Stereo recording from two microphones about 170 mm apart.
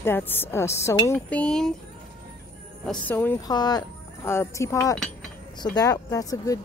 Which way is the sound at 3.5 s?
25° left (ahead or behind).